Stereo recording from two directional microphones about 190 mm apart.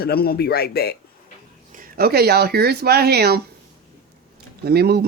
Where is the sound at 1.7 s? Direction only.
50° right (ahead or behind).